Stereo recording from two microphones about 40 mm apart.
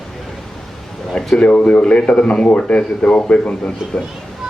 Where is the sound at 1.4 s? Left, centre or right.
Left.